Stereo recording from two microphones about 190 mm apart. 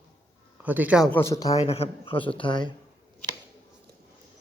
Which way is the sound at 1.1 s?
15° left (ahead or behind).